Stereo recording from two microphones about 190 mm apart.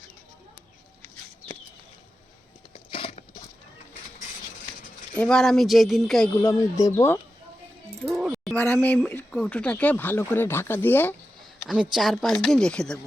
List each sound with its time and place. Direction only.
2.7 s a sound: 30° left (ahead or behind)
5.1 s speech: 5° left (ahead or behind)
6.3 s speech: 15° left (ahead or behind)
8.0 s a sound: centre (ahead or behind)
8.5 s speech: 10° left (ahead or behind)
11.7 s speech: 5° right (ahead or behind)